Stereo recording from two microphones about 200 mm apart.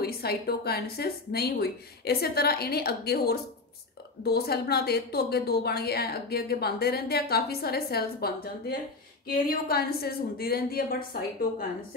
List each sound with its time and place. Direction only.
0.0 s a woman's voice: 50° left (ahead or behind)